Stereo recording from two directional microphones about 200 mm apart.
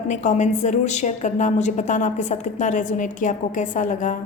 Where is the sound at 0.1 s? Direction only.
35° left (ahead or behind).